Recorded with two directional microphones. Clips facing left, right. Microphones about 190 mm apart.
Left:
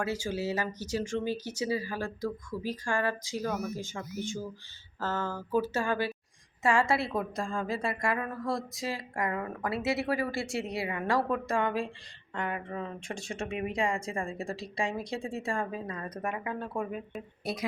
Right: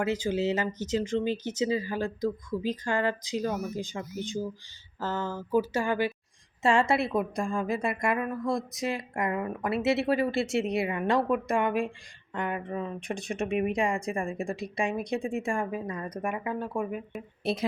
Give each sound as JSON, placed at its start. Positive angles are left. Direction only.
{"t": 0.0, "sound": "a woman's voice", "side_deg": -20}
{"t": 17.4, "sound": "speech", "side_deg": -25}